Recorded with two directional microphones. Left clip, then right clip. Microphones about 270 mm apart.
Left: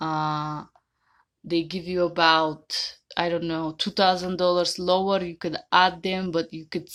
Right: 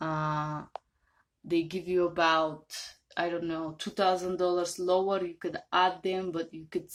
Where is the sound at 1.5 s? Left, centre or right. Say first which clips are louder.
Left 3 dB; left.